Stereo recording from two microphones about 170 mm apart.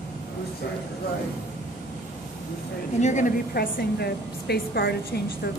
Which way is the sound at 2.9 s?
45° left (ahead or behind).